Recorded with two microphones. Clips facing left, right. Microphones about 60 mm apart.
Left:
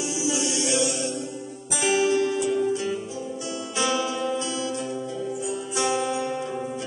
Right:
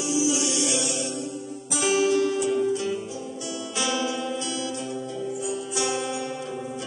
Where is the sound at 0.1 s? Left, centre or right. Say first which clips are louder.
Right 5 dB; left.